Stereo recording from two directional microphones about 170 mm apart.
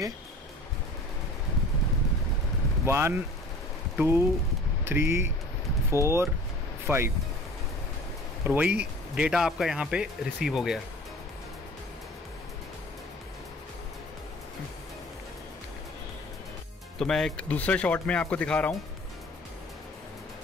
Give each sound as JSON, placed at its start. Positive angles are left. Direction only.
{"t": 2.8, "sound": "speech", "side_deg": -15}
{"t": 8.5, "sound": "speech", "side_deg": -10}
{"t": 17.0, "sound": "speech", "side_deg": 5}